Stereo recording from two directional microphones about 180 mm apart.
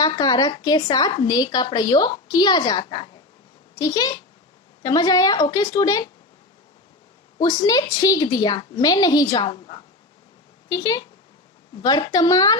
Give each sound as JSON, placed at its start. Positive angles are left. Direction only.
{"t": 0.0, "sound": "a woman's voice", "side_deg": 20}
{"t": 7.3, "sound": "a woman's voice", "side_deg": 20}